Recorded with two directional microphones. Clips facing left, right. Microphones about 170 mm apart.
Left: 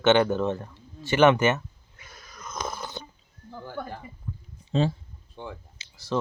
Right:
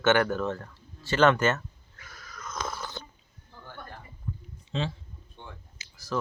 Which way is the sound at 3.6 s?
90° left.